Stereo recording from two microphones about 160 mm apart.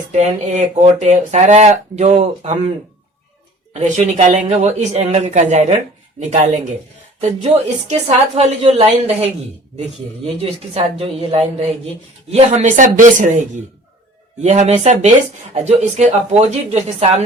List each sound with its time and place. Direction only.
0.1 s speech: 45° right (ahead or behind)
3.7 s a woman's voice: 45° right (ahead or behind)
10.2 s a woman's voice: 35° right (ahead or behind)
14.4 s speech: 45° right (ahead or behind)